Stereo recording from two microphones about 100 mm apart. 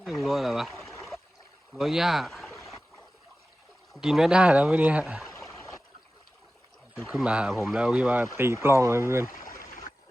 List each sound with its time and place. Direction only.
0.0 s speech: centre (ahead or behind)
1.7 s speech: centre (ahead or behind)
3.9 s speech: 5° right (ahead or behind)
5.2 s a sound: centre (ahead or behind)
7.2 s speech: 10° right (ahead or behind)
8.4 s speech: 25° right (ahead or behind)